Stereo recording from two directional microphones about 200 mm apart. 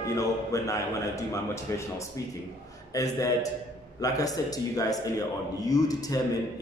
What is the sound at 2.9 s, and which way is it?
A man's voice, 15° left (ahead or behind).